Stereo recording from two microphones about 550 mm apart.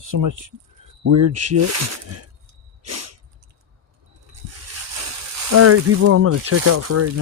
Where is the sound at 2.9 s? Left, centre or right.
Right.